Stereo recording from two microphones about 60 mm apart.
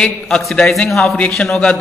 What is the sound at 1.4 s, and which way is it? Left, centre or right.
Speech, centre.